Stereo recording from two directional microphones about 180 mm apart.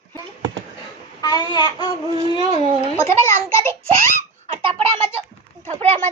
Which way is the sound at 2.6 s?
30° right (ahead or behind).